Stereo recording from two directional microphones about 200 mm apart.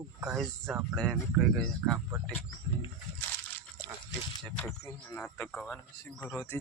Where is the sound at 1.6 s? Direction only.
Centre (ahead or behind).